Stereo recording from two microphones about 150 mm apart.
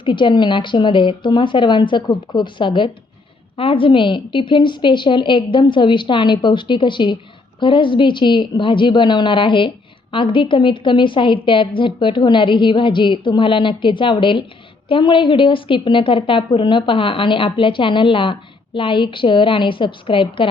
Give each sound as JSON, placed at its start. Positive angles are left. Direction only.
{"t": 0.0, "sound": "a woman's voice", "side_deg": 35}